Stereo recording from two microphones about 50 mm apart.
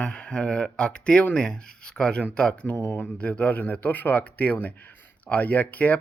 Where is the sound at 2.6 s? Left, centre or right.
Left.